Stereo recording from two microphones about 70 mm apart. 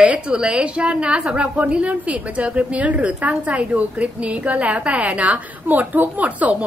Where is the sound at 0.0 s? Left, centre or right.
Centre.